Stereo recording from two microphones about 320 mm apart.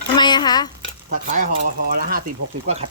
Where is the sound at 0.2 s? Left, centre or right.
Centre.